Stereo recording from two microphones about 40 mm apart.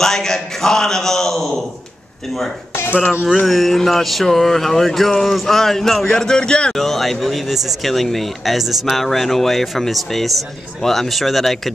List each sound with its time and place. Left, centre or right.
0.0 s a man's voice: centre
3.4 s speech: centre
6.0 s speech: centre
6.7 s speech: centre